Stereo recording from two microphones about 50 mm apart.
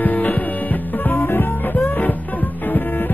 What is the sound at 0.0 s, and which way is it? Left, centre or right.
Music, left.